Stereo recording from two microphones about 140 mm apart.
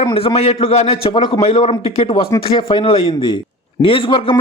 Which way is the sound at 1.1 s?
30° left (ahead or behind).